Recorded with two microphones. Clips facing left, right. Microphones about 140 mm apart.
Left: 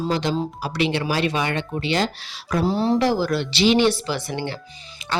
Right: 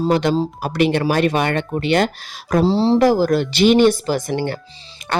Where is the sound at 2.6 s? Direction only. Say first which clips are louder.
Right 5 dB; 30° right (ahead or behind).